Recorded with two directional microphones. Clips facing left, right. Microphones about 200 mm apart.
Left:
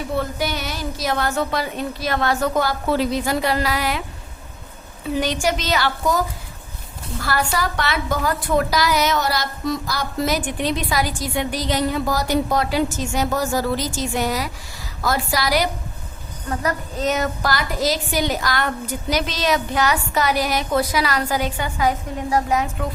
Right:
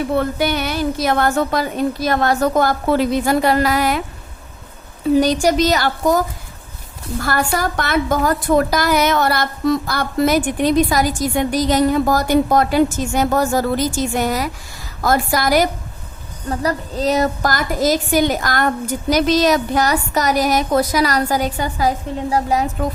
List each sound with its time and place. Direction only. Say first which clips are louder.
0.2 s a woman's voice: right 5 dB; 60° right (ahead or behind)
5.2 s a woman's voice: right 7 dB; 40° right (ahead or behind)
16.5 s a woman's voice: right 3 dB; 35° right (ahead or behind)